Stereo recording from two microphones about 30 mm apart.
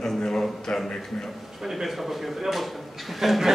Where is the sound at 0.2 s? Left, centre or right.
Left.